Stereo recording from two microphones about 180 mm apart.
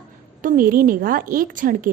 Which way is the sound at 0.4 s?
50° right (ahead or behind).